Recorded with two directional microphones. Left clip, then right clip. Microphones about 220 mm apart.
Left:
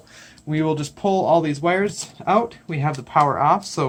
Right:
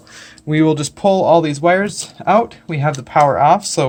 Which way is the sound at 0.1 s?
45° right (ahead or behind).